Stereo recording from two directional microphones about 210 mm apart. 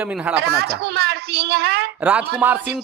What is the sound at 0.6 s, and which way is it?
A woman's voice, 50° right (ahead or behind).